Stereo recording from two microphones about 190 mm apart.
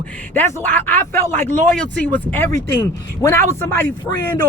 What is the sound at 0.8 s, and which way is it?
Speech, 10° left (ahead or behind).